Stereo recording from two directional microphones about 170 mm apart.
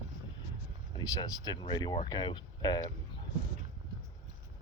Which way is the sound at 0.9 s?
20° left (ahead or behind).